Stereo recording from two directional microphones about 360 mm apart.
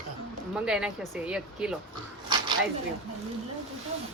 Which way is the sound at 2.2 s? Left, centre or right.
Centre.